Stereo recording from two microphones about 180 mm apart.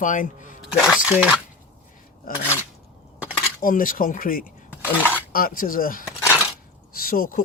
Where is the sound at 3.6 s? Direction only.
50° left (ahead or behind).